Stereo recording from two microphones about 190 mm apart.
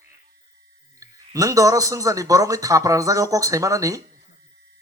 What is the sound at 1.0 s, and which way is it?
Speech, 15° right (ahead or behind).